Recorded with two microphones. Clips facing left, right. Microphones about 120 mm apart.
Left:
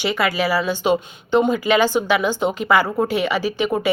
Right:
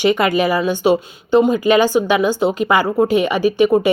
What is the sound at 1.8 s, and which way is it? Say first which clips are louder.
Speech: right 3 dB; 15° right (ahead or behind).